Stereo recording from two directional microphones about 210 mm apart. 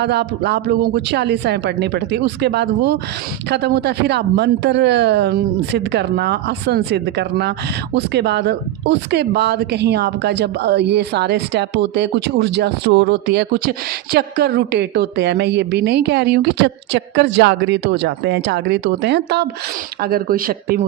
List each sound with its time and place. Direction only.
0.0 s speech: 50° right (ahead or behind)